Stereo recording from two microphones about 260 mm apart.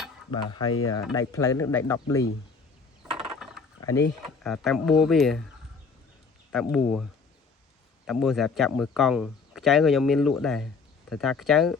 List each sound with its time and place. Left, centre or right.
0.3 s speech: centre
3.3 s a sound: centre
3.8 s speech: centre
6.5 s speech: centre